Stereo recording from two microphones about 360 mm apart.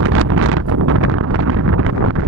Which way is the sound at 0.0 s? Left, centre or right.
Right.